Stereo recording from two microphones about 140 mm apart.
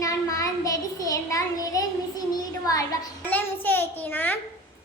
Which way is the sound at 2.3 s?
25° left (ahead or behind).